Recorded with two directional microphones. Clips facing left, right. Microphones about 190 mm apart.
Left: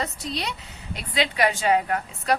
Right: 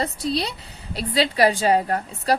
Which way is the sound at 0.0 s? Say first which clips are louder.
Right 5 dB; 35° right (ahead or behind).